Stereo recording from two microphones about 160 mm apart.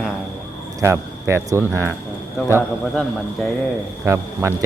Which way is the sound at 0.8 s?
15° right (ahead or behind).